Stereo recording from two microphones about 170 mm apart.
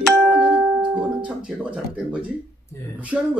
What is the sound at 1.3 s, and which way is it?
Speech, 5° right (ahead or behind).